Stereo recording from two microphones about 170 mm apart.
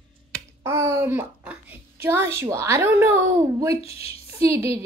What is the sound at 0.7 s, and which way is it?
A child's voice, 15° right (ahead or behind).